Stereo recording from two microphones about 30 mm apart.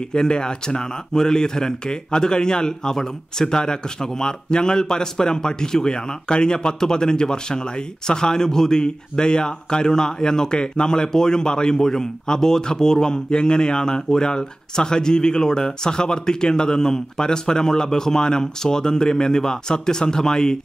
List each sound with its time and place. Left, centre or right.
0.1 s speech: left